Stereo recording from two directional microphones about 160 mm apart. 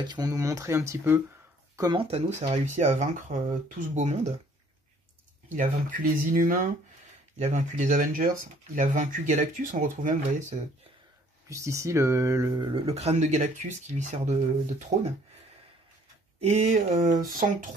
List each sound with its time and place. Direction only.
0.0 s speech: 25° right (ahead or behind)
1.8 s speech: 25° right (ahead or behind)
2.0 s speech: 40° right (ahead or behind)
5.6 s speech: 60° right (ahead or behind)
7.3 s speech: 45° right (ahead or behind)
11.4 s speech: 20° right (ahead or behind); by 15.1 s 45° right (ahead or behind)
16.3 s speech: 45° right (ahead or behind)